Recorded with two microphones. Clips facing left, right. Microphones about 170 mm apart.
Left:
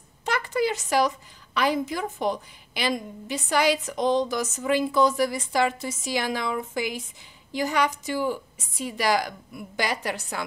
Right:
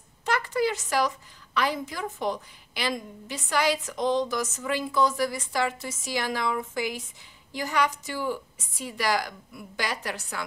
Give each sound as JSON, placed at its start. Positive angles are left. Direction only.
{"t": 0.2, "sound": "a woman's voice", "side_deg": 20}